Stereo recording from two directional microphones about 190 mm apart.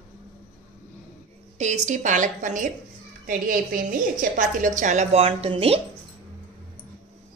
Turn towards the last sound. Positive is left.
turn(degrees=-30)  # may be behind; listen again after turning